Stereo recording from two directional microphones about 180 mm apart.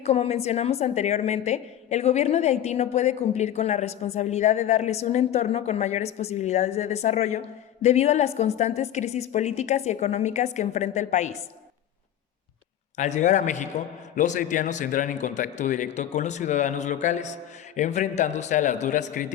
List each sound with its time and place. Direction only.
0.0 s a woman's voice: 35° left (ahead or behind)
13.0 s a man's voice: 40° left (ahead or behind)